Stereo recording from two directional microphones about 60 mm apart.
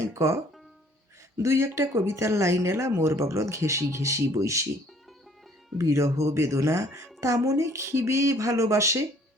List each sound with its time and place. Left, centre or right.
0.0 s a woman's voice: right
1.4 s a woman's voice: right
5.7 s a woman's voice: right